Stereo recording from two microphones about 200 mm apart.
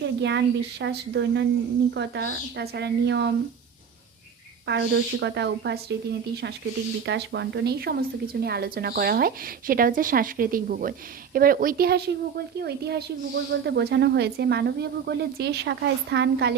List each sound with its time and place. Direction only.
0.0 s speech: 60° right (ahead or behind)
4.6 s speech: 60° right (ahead or behind)